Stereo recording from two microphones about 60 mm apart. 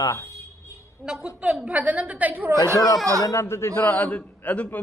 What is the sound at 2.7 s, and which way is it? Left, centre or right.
Speech, left.